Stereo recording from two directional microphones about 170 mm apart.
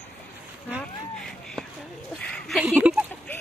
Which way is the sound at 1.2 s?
5° left (ahead or behind).